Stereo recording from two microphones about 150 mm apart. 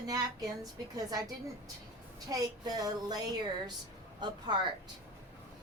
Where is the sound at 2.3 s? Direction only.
25° right (ahead or behind).